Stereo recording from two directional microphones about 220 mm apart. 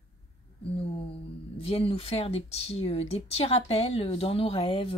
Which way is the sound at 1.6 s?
25° left (ahead or behind).